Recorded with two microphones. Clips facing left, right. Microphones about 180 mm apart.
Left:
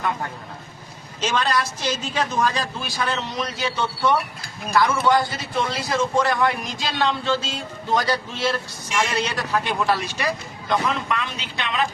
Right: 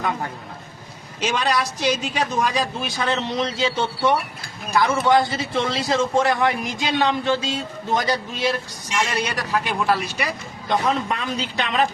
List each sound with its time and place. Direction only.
1.2 s a man's voice: 15° right (ahead or behind)
10.7 s a man's voice: 35° right (ahead or behind)